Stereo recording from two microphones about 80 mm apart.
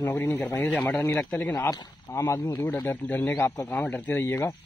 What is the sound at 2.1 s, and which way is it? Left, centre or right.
Speech, left.